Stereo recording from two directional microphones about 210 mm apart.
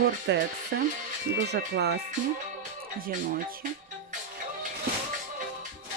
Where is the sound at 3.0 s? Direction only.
45° right (ahead or behind).